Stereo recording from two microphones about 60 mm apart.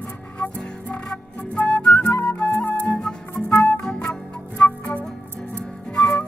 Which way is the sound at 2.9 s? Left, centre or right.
Centre.